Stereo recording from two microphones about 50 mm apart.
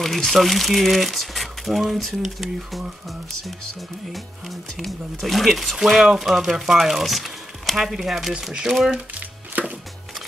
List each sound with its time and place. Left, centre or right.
0.0 s speech: centre
4.1 s speech: centre
9.5 s music: right